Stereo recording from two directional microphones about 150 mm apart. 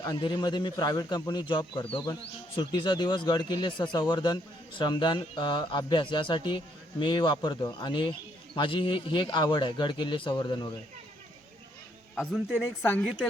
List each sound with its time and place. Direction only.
0.0 s a man's voice: 30° left (ahead or behind)
12.1 s a man's voice: 10° left (ahead or behind)